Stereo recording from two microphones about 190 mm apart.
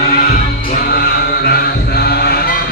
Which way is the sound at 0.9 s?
55° left (ahead or behind).